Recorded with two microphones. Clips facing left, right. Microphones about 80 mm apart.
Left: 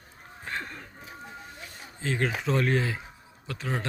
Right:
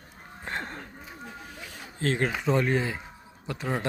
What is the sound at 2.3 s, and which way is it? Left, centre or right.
A man's voice, centre.